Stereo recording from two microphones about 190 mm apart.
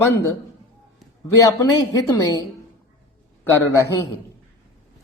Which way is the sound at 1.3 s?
15° left (ahead or behind).